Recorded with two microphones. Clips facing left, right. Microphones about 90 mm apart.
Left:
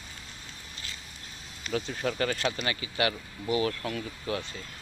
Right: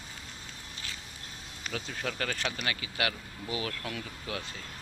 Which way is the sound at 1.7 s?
10° left (ahead or behind).